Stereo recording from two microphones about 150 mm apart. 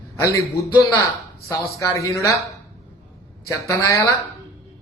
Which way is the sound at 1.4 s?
20° left (ahead or behind).